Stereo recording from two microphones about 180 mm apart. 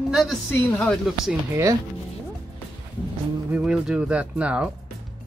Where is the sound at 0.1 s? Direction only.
Centre (ahead or behind).